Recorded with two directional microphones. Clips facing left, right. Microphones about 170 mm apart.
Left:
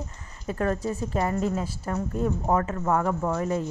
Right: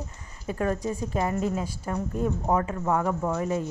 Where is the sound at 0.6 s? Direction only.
15° right (ahead or behind).